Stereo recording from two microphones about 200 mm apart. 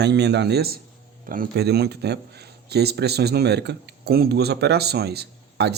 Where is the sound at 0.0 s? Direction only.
55° right (ahead or behind).